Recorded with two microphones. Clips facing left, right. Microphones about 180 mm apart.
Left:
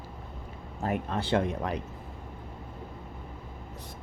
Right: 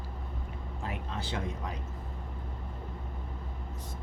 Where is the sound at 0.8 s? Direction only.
55° left (ahead or behind).